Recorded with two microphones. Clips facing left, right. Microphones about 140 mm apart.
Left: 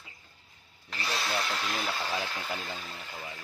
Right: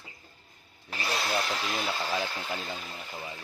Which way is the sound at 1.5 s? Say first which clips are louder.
Right 1 dB; 5° right (ahead or behind).